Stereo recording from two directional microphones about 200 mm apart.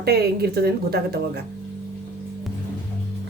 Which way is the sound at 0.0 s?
50° right (ahead or behind).